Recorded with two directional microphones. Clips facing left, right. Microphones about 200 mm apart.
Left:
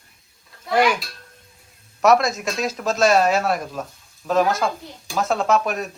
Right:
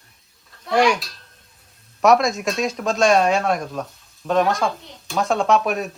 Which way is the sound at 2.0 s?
Centre (ahead or behind).